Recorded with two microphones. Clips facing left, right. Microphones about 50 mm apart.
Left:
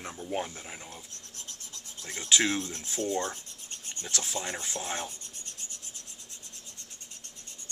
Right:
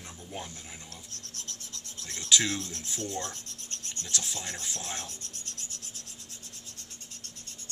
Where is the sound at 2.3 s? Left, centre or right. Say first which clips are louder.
Left 1 dB; left.